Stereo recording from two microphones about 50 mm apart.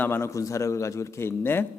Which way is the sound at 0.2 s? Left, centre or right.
Left.